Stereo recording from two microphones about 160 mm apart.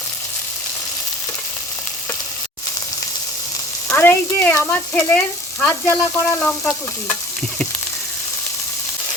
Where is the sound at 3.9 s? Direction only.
15° left (ahead or behind).